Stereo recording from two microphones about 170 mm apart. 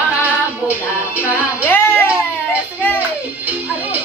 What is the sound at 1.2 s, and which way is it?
Music, 10° left (ahead or behind).